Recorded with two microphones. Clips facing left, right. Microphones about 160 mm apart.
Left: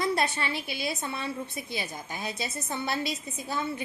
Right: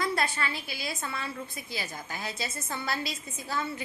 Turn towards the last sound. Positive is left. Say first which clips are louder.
# left 2 dB
turn(degrees=20)  # may be behind; listen again after turning